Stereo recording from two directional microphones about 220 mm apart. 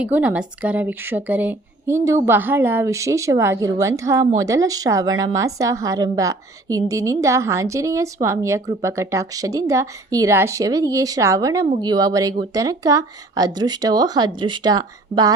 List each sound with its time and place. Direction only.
0.0 s a woman's voice: 5° right (ahead or behind)